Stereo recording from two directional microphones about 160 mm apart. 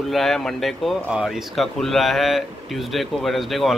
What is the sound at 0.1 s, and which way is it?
Speech, centre (ahead or behind).